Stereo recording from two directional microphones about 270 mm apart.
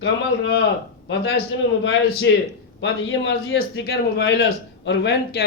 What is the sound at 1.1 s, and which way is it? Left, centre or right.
Speech, left.